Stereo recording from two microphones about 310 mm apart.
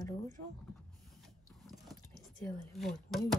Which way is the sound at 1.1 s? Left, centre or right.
Centre.